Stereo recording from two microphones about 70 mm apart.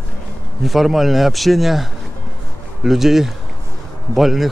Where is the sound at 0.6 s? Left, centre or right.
Centre.